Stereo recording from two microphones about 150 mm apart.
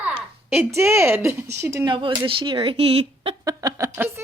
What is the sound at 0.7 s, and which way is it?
Speech, 20° right (ahead or behind).